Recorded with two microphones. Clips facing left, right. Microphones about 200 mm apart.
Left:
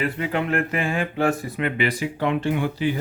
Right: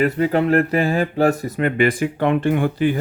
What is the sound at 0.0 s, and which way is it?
Speech, 40° right (ahead or behind).